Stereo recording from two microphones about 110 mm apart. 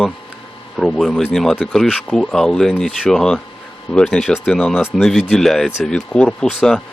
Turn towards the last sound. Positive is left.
turn(degrees=5)  # may be behind; listen again after turning